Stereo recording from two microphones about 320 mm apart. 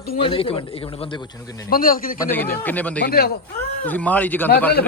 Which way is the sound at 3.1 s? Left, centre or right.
Left.